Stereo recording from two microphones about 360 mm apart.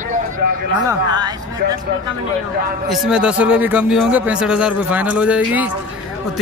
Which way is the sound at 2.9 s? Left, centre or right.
Centre.